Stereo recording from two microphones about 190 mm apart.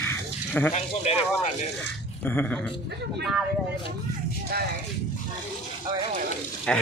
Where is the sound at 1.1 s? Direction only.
35° left (ahead or behind).